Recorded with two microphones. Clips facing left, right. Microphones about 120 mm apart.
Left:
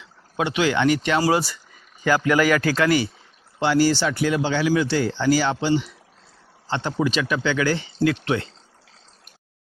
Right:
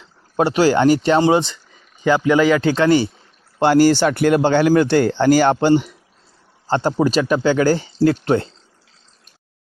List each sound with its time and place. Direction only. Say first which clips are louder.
0.0 s speech: right 7 dB; 40° right (ahead or behind)
3.6 s speech: right 6 dB; 50° right (ahead or behind)